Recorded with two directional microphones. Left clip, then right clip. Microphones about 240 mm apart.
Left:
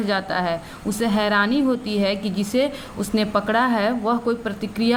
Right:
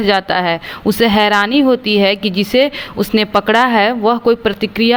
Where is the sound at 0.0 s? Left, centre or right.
Right.